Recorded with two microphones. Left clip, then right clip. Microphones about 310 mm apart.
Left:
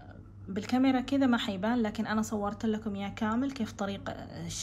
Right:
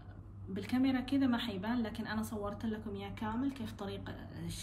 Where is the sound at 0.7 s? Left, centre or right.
Centre.